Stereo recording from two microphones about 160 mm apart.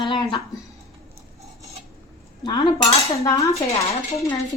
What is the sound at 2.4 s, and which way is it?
A woman's voice, 30° left (ahead or behind).